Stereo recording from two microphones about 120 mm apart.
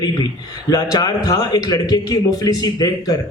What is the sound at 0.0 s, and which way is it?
A man's voice, 35° left (ahead or behind).